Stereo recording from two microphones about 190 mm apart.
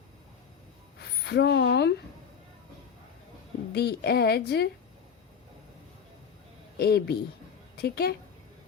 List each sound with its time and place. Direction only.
1.2 s speech: 60° left (ahead or behind)
3.7 s a woman's voice: 60° left (ahead or behind)
6.7 s a woman's voice: 55° left (ahead or behind)